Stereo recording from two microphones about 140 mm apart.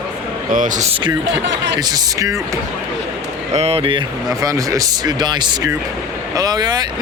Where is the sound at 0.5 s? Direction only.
65° right (ahead or behind).